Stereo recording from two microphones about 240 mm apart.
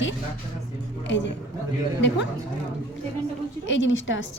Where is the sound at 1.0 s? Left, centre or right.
Left.